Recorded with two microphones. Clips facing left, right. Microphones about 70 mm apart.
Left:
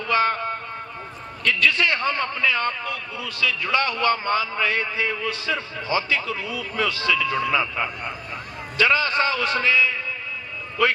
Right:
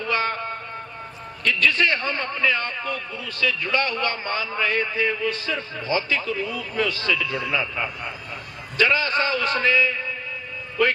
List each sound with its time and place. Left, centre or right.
0.1 s a sound: left
1.5 s a man's voice: right
7.3 s a man's voice: left
8.8 s a man's voice: right